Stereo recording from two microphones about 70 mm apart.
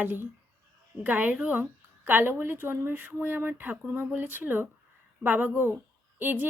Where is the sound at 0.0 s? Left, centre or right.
Right.